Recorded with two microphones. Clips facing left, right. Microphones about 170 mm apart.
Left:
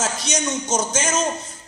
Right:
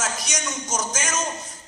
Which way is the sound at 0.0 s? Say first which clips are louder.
Left 5 dB; 30° left (ahead or behind).